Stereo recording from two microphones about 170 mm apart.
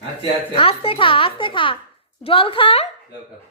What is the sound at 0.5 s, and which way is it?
Speech, 35° left (ahead or behind).